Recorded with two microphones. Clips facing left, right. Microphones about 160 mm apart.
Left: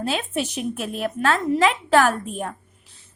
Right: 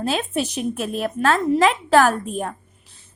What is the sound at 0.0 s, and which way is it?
Speech, 40° right (ahead or behind).